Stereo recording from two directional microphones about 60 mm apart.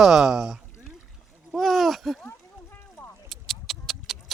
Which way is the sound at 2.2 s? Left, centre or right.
Left.